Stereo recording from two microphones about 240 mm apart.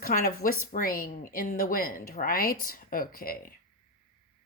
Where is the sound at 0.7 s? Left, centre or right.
Left.